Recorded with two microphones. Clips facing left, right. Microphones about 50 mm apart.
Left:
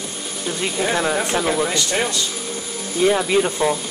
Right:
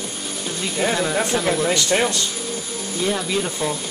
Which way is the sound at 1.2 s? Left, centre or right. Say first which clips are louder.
Even; centre.